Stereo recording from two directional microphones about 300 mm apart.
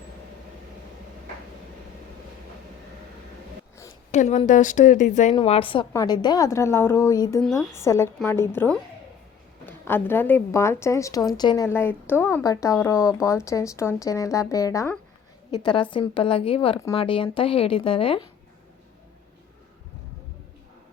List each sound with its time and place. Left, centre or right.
4.1 s a woman's voice: left